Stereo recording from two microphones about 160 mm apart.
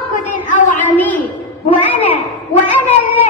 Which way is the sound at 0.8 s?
10° left (ahead or behind).